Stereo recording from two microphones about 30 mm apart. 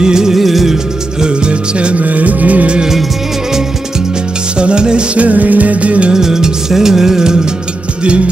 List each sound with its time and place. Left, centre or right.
0.0 s music: right
0.4 s music: centre
1.2 s music: right
2.0 s music: right
4.6 s music: right
5.1 s music: right
6.1 s music: centre